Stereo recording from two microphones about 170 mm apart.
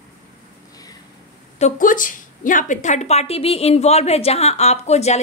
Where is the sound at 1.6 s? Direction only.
50° left (ahead or behind).